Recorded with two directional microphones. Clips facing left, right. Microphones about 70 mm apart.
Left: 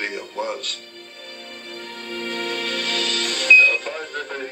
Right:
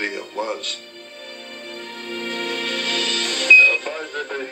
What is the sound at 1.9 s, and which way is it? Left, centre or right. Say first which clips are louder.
Music: even; right.